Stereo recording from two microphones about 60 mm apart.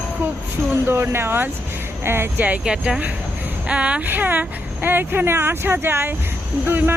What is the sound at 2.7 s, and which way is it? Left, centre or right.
Speech, centre.